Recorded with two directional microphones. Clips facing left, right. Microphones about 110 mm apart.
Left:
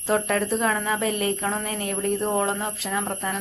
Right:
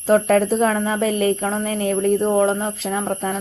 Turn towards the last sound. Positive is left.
turn(degrees=-35)  # may be behind; listen again after turning